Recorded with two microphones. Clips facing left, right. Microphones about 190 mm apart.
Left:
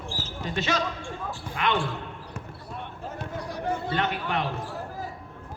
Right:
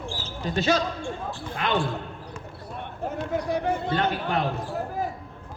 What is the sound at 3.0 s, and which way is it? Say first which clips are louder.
Run: right 9 dB; 60° right (ahead or behind).